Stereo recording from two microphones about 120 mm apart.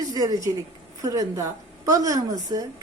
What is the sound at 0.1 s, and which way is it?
A woman's voice, 30° right (ahead or behind).